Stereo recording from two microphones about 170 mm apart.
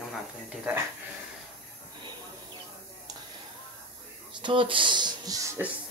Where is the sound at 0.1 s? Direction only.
5° right (ahead or behind).